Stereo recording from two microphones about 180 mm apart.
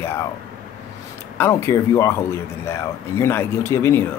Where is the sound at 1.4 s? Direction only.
15° left (ahead or behind).